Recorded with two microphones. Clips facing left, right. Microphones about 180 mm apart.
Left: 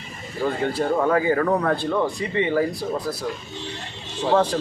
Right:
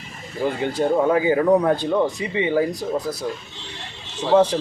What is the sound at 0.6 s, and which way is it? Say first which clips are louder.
Speech: right 3 dB; 20° right (ahead or behind).